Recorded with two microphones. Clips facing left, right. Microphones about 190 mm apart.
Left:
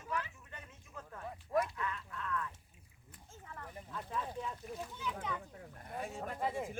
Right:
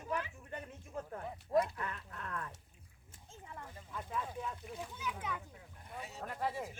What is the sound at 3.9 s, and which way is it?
Speech, 10° right (ahead or behind).